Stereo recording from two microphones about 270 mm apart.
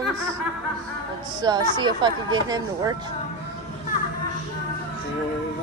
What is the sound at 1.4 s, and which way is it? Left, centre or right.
Speech, centre.